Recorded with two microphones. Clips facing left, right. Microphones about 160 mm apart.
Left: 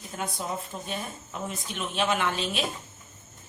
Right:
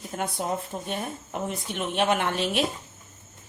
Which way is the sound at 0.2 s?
55° right (ahead or behind).